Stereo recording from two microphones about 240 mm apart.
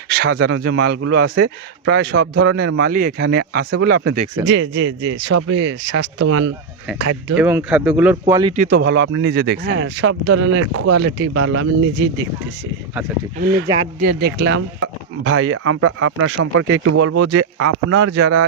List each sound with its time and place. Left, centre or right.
0.1 s speech: right
4.7 s speech: right
7.3 s speech: centre
8.3 s speech: centre
8.5 s speech: right
13.4 s speech: right
14.8 s speech: right